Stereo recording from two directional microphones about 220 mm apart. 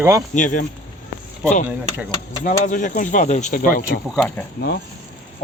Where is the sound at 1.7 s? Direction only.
5° right (ahead or behind).